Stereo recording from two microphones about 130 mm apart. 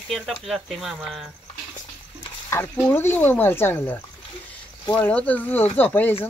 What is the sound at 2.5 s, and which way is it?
Speech, 15° left (ahead or behind).